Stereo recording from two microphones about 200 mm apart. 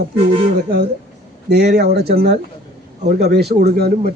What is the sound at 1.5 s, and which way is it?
Speech, 55° right (ahead or behind).